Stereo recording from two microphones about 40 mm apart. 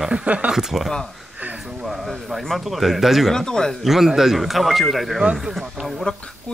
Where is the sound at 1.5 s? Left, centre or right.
Right.